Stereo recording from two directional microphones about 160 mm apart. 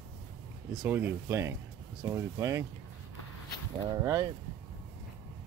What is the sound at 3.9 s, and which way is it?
Speech, 20° right (ahead or behind).